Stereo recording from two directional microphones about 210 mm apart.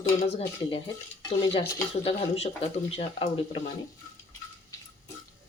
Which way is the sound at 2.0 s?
30° left (ahead or behind).